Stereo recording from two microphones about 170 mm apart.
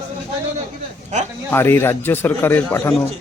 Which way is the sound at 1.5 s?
15° left (ahead or behind).